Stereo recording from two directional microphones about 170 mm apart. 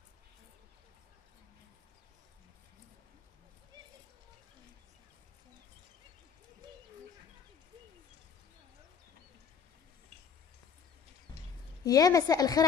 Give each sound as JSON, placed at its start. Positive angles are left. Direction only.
{"t": 11.8, "sound": "a woman's voice", "side_deg": 20}